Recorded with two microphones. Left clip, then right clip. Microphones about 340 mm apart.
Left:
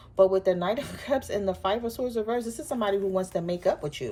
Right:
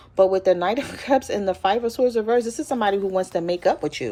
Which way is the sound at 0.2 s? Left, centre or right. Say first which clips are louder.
Right 4 dB; right.